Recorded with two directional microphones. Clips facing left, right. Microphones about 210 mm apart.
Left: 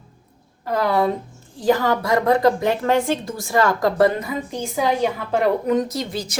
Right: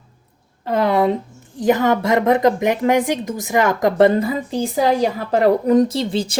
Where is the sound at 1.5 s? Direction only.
20° right (ahead or behind).